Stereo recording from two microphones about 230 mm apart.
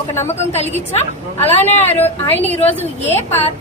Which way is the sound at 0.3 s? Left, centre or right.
Left.